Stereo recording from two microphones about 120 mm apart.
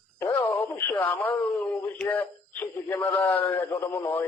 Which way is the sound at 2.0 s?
15° left (ahead or behind).